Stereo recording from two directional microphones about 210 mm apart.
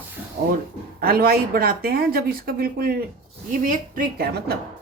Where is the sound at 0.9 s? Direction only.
45° right (ahead or behind).